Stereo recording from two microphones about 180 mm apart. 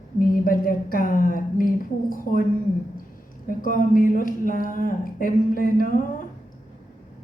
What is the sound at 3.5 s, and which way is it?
Speech, 50° left (ahead or behind).